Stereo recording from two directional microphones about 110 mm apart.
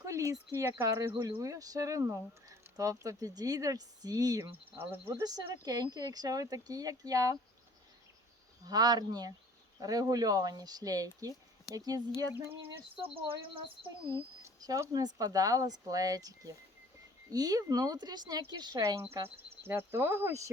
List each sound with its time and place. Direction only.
0.0 s speech: 30° right (ahead or behind)
8.6 s speech: 35° right (ahead or behind)
12.3 s speech: 15° right (ahead or behind)
12.6 s speech: 55° right (ahead or behind)
14.4 s speech: 30° right (ahead or behind)
18.8 s speech: 30° right (ahead or behind)
19.0 s speech: 65° right (ahead or behind)
19.6 s speech: 20° right (ahead or behind)